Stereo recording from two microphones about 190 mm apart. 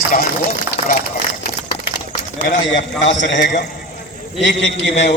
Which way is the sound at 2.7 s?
75° left (ahead or behind).